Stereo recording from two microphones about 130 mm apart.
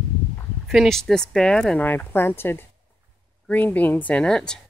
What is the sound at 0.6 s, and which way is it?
Speech, centre (ahead or behind).